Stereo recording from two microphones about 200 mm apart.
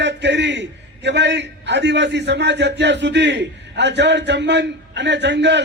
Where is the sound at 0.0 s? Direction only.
60° right (ahead or behind).